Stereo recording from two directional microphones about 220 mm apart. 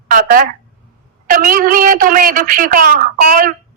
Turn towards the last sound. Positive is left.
turn(degrees=-40)  # may be behind; listen again after turning